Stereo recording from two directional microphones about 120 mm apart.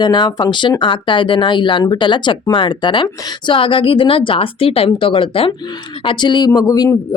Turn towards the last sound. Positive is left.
turn(degrees=30)  # may be behind; listen again after turning